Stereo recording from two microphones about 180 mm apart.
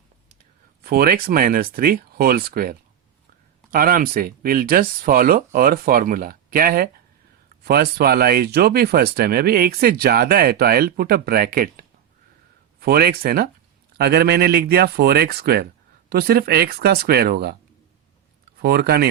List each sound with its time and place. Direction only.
0.9 s speech: 55° right (ahead or behind)
18.6 s speech: 60° right (ahead or behind)